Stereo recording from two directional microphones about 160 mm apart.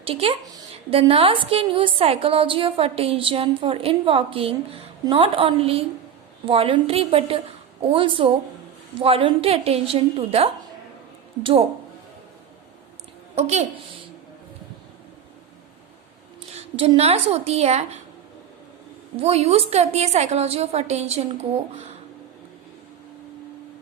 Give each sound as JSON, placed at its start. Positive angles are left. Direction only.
{"t": 0.0, "sound": "a woman's voice", "side_deg": -35}
{"t": 13.3, "sound": "a woman's voice", "side_deg": -40}
{"t": 16.5, "sound": "speech", "side_deg": -40}
{"t": 19.1, "sound": "a woman's voice", "side_deg": -40}